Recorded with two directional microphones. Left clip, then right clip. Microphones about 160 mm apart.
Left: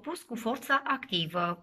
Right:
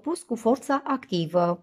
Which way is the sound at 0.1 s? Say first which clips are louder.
Right 10 dB; 35° right (ahead or behind).